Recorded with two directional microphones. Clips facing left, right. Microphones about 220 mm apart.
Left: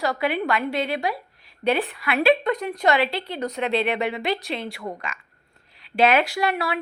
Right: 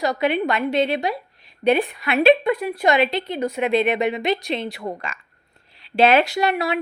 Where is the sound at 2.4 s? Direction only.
5° right (ahead or behind).